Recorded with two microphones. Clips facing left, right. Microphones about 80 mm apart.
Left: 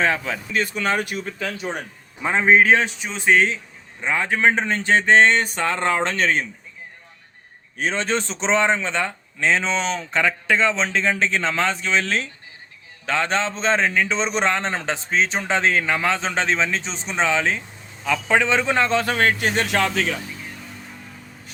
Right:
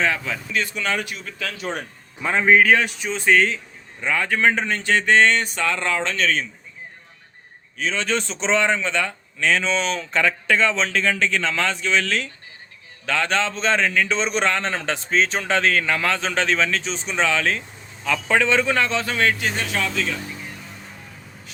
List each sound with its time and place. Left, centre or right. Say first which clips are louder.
0.0 s speech: left 1 dB; left
1.2 s a man's voice: left 2 dB; left
7.9 s a man's voice: even; left
18.9 s speech: left 2 dB; left
19.4 s speech: left 4 dB; left